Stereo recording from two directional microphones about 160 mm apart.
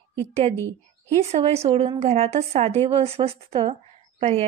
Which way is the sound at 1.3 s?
40° right (ahead or behind).